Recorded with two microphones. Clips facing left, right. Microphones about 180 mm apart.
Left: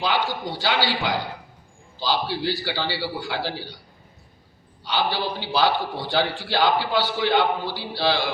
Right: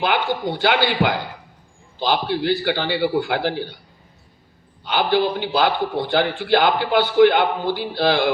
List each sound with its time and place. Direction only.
0.0 s a man's voice: 55° right (ahead or behind)
4.9 s a man's voice: 55° right (ahead or behind)